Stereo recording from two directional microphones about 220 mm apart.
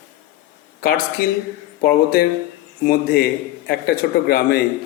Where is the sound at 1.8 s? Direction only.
45° left (ahead or behind).